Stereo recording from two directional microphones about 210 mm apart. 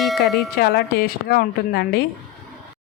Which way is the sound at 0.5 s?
50° left (ahead or behind).